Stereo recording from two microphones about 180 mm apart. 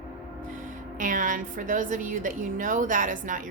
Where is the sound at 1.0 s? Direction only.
45° right (ahead or behind).